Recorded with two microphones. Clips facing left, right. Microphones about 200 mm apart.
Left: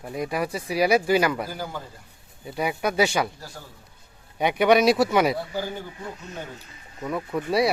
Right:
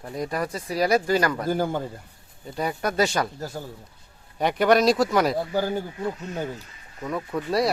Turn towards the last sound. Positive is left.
turn(degrees=5)  # may be behind; listen again after turning